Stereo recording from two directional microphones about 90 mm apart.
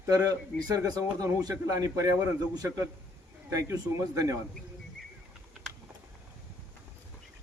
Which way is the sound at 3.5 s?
35° right (ahead or behind).